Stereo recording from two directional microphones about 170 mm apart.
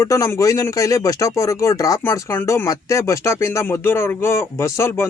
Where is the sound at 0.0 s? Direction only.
20° left (ahead or behind).